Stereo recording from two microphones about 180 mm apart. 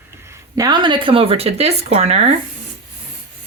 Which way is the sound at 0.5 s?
20° right (ahead or behind).